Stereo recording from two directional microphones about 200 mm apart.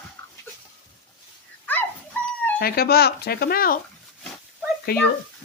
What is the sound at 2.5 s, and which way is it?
Speech, 50° left (ahead or behind).